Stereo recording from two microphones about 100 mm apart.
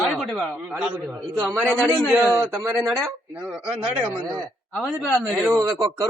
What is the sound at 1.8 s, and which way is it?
Speech, 15° right (ahead or behind).